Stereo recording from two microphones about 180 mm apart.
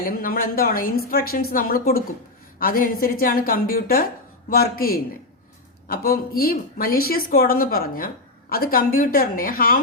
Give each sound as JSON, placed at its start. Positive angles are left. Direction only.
{"t": 0.0, "sound": "speech", "side_deg": 55}